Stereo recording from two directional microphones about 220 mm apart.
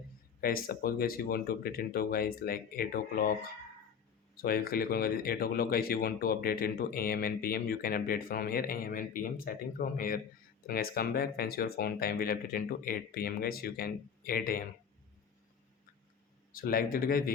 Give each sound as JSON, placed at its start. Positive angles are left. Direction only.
{"t": 0.4, "sound": "speech", "side_deg": 40}
{"t": 4.4, "sound": "speech", "side_deg": 45}
{"t": 16.6, "sound": "speech", "side_deg": 40}